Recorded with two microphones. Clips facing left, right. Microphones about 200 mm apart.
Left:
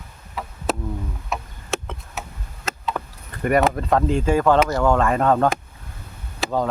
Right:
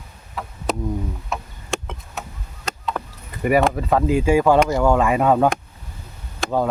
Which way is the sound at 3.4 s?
5° right (ahead or behind).